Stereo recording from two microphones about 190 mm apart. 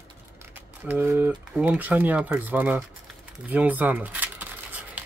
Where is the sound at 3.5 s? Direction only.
10° right (ahead or behind).